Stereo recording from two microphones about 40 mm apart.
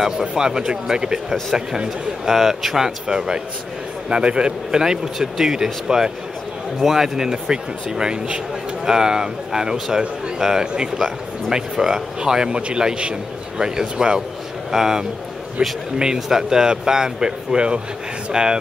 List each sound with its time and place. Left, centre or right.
0.2 s speech: centre
2.2 s a man's voice: centre
15.6 s a man's voice: right
16.0 s a man's voice: centre